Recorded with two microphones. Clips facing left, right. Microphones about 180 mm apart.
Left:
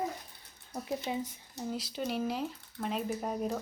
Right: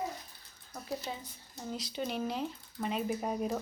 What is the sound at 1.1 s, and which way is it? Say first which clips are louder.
Speech: left 6 dB; 15° left (ahead or behind).